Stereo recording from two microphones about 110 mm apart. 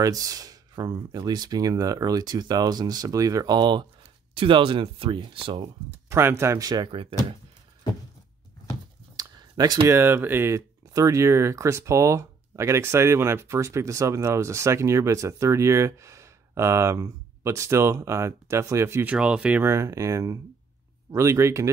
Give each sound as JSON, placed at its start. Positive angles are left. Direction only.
{"t": 0.0, "sound": "speech", "side_deg": -35}
{"t": 4.4, "sound": "speech", "side_deg": -50}
{"t": 6.0, "sound": "speech", "side_deg": -25}
{"t": 6.9, "sound": "speech", "side_deg": -55}
{"t": 9.1, "sound": "a sound", "side_deg": -35}
{"t": 9.9, "sound": "speech", "side_deg": -20}
{"t": 19.1, "sound": "speech", "side_deg": -10}
{"t": 19.6, "sound": "speech", "side_deg": -25}